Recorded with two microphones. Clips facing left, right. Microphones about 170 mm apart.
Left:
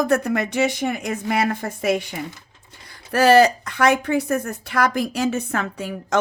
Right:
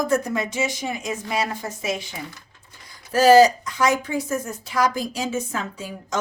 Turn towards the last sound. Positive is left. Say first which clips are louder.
# left 5 dB
turn(degrees=60)  # may be behind; listen again after turning